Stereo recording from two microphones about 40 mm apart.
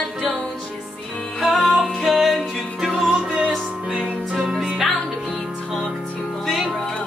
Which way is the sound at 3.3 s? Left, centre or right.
Right.